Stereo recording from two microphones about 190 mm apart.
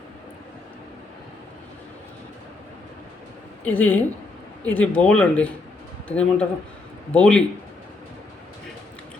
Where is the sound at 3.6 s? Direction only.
10° left (ahead or behind).